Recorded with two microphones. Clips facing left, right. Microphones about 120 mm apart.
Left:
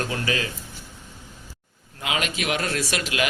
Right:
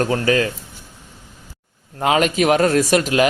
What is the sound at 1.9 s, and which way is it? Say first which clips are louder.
Speech: right 11 dB; 40° right (ahead or behind).